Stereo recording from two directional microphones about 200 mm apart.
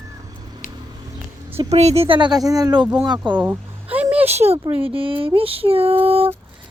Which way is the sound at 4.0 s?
5° right (ahead or behind).